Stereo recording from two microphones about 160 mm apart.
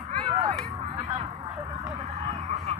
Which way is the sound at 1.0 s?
20° right (ahead or behind).